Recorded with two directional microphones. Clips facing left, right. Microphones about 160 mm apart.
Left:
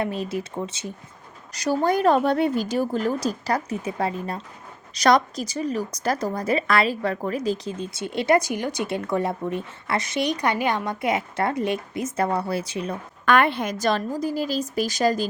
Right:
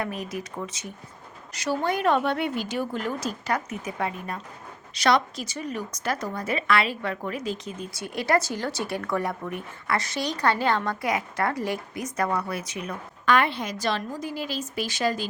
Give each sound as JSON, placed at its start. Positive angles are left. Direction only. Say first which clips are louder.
{"t": 0.0, "sound": "a woman's voice", "louder": "left 5 dB", "side_deg": 30}
{"t": 1.5, "sound": "a woman's voice", "louder": "left 5 dB", "side_deg": 40}
{"t": 13.2, "sound": "speech", "louder": "left 3 dB", "side_deg": 55}